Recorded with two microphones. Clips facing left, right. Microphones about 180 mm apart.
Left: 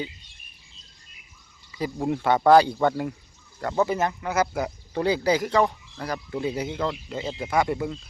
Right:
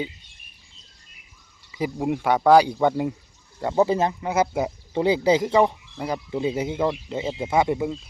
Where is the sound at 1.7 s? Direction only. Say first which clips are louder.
Right 3 dB; 15° right (ahead or behind).